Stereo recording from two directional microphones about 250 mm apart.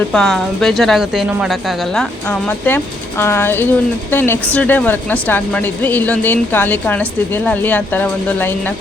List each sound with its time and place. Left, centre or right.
0.1 s a woman's voice: centre